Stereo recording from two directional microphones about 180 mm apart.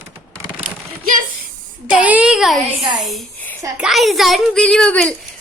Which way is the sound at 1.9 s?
10° right (ahead or behind).